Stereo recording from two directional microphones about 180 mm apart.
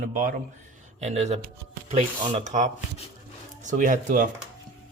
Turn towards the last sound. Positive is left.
turn(degrees=-45)  # may be behind; listen again after turning